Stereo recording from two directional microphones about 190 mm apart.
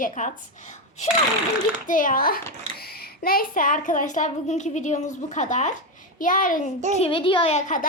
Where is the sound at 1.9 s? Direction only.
45° left (ahead or behind).